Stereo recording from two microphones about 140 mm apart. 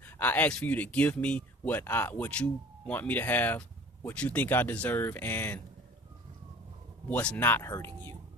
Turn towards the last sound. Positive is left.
turn(degrees=20)  # may be behind; listen again after turning